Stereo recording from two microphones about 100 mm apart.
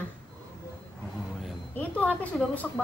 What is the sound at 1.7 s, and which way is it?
A child's voice, 15° left (ahead or behind).